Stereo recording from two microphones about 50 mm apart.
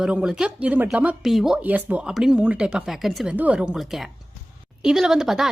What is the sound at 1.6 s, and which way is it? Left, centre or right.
A woman's voice, right.